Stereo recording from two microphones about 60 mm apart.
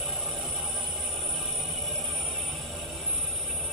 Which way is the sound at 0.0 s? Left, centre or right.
Centre.